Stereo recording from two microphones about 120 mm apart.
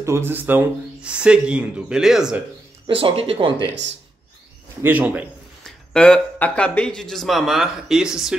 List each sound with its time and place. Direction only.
0.0 s speech: 20° right (ahead or behind); by 2.3 s 5° right (ahead or behind)
2.9 s speech: 50° right (ahead or behind)
4.8 s speech: 10° right (ahead or behind)
5.6 s speech: 5° left (ahead or behind)